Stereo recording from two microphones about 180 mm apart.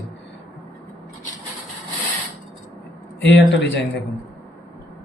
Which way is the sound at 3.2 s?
85° left.